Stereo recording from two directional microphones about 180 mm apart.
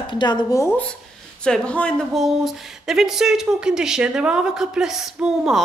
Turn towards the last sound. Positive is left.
turn(degrees=0)  # may be behind; listen again after turning